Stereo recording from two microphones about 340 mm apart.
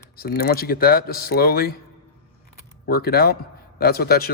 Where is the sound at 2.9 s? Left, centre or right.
Left.